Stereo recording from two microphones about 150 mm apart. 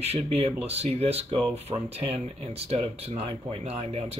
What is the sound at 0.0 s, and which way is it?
Speech, 45° right (ahead or behind).